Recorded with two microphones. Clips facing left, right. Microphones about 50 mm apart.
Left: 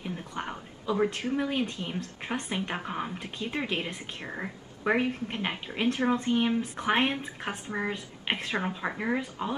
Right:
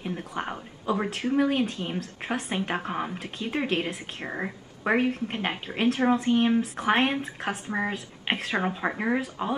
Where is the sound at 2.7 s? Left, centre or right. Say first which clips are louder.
Right 3 dB; centre.